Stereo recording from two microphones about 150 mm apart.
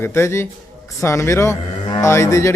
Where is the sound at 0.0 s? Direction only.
15° left (ahead or behind).